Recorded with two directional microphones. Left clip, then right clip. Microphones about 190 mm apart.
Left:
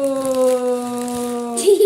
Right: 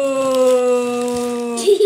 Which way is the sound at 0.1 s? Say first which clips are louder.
Right 3 dB; 15° right (ahead or behind).